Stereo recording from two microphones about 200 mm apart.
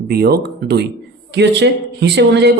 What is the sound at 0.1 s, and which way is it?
A man's voice, 55° right (ahead or behind).